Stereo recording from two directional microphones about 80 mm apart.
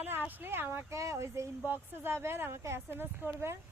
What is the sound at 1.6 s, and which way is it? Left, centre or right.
Speech, right.